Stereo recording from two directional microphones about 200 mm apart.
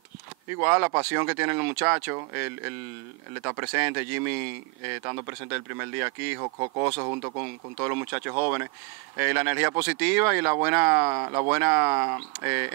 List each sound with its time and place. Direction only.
0.6 s speech: 15° right (ahead or behind)
6.4 s speech: 25° right (ahead or behind)